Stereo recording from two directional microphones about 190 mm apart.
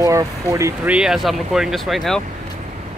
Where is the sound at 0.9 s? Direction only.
5° right (ahead or behind).